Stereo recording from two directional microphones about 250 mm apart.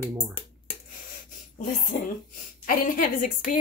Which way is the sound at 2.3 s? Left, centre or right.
Left.